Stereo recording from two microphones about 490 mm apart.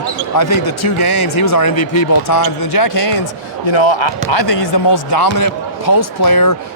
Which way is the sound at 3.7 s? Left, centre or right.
Left.